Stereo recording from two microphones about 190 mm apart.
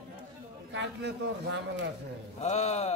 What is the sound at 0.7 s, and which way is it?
Speech, 70° right (ahead or behind).